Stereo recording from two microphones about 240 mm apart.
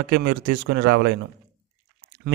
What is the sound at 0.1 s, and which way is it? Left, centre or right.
A man's voice, right.